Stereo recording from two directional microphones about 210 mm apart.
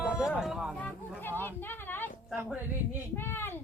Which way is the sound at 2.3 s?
5° right (ahead or behind).